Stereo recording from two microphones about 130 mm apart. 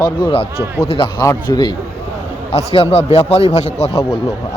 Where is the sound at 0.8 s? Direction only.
45° left (ahead or behind).